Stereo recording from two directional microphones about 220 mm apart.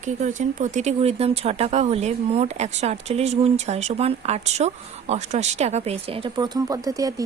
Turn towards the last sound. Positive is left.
turn(degrees=-15)  # may be behind; listen again after turning